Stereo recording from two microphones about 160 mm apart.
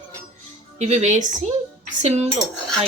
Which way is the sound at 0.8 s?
45° right (ahead or behind).